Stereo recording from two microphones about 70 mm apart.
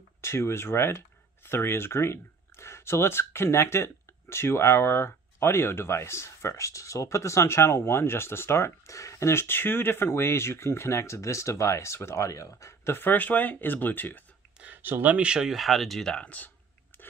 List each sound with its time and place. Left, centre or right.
0.2 s speech: left
12.9 s speech: left
14.6 s speech: right; by 16.5 s left
16.9 s a sound: left